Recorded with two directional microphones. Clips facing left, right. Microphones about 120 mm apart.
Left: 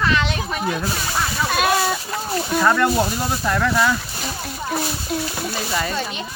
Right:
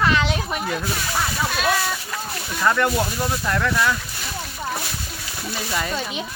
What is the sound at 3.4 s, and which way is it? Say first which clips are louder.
Speech: left 4 dB; 10° left (ahead or behind).